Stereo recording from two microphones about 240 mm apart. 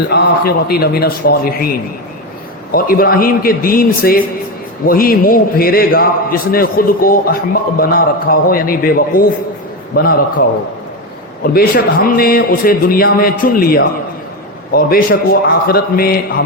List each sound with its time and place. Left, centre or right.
0.1 s a man's voice: left
2.7 s a man's voice: left
11.4 s a man's voice: left